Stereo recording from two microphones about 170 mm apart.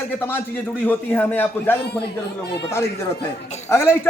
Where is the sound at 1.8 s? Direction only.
75° left (ahead or behind).